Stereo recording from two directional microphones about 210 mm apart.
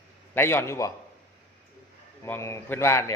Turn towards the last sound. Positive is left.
turn(degrees=15)  # may be behind; listen again after turning